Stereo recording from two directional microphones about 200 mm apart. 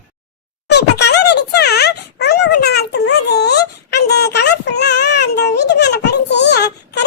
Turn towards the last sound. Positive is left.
turn(degrees=60)  # may be behind; listen again after turning